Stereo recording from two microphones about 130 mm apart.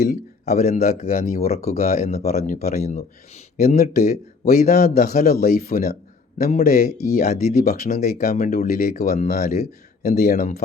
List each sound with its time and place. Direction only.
0.1 s speech: 65° left (ahead or behind); by 1.5 s 90° left
1.7 s speech: 55° left (ahead or behind)